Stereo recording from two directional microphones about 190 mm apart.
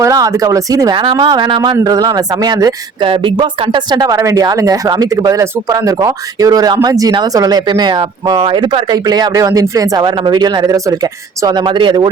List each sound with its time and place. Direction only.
0.0 s speech: 20° right (ahead or behind)